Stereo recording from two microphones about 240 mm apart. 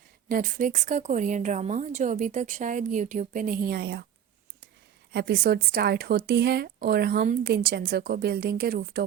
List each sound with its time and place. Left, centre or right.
0.3 s a woman's voice: right
5.1 s a woman's voice: right